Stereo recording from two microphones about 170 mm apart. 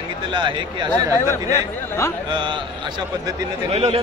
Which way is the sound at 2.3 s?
30° right (ahead or behind).